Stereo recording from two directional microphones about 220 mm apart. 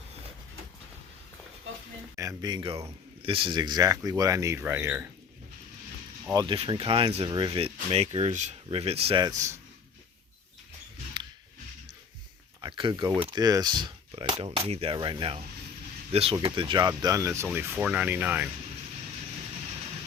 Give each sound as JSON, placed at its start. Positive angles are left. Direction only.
{"t": 2.1, "sound": "speech", "side_deg": -15}
{"t": 6.3, "sound": "speech", "side_deg": -20}
{"t": 12.6, "sound": "speech", "side_deg": -20}